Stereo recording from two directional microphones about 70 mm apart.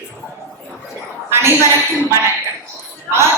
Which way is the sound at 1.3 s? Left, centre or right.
Right.